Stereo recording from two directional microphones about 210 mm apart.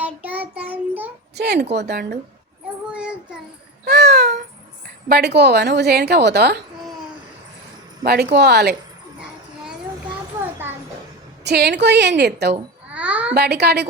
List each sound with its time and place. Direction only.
0.0 s child singing: 5° right (ahead or behind)
1.4 s speech: 50° right (ahead or behind)
2.9 s child singing: 5° right (ahead or behind)
3.8 s babbling: 50° right (ahead or behind)
5.0 s speech: 50° right (ahead or behind)
8.0 s speech: 50° right (ahead or behind)
11.4 s speech: 50° right (ahead or behind)
12.9 s a sound: 5° right (ahead or behind)
13.3 s speech: 50° right (ahead or behind)